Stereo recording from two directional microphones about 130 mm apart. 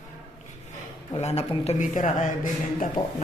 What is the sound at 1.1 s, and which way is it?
Speech, 55° left (ahead or behind).